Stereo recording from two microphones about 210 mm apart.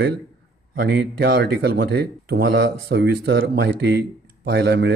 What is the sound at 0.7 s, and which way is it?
Speech, 50° right (ahead or behind).